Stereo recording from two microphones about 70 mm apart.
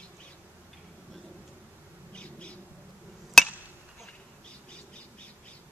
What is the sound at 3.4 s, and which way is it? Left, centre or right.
Hammer, centre.